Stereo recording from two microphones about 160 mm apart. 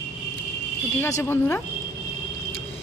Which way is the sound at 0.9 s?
15° left (ahead or behind).